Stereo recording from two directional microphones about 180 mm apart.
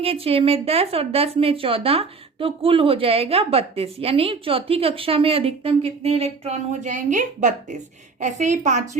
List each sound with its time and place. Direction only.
0.0 s a woman's voice: 35° right (ahead or behind)